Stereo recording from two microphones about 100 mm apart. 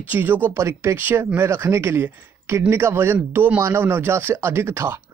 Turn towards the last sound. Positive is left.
turn(degrees=-25)  # may be behind; listen again after turning